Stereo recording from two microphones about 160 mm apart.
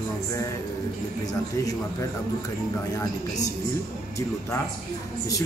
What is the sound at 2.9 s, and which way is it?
Speech, 20° left (ahead or behind).